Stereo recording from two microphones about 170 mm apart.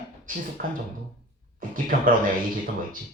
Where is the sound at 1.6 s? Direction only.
55° right (ahead or behind).